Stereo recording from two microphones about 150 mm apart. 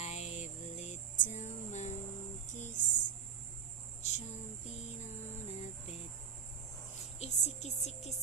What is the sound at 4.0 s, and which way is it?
Cricket, 50° left (ahead or behind).